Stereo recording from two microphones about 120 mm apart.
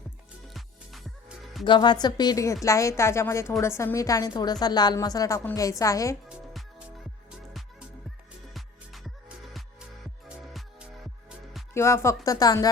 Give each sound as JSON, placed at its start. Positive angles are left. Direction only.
{"t": 0.5, "sound": "music", "side_deg": 0}
{"t": 1.6, "sound": "a woman's voice", "side_deg": 40}
{"t": 6.2, "sound": "music", "side_deg": -5}
{"t": 8.5, "sound": "music", "side_deg": 0}
{"t": 11.7, "sound": "speech", "side_deg": 20}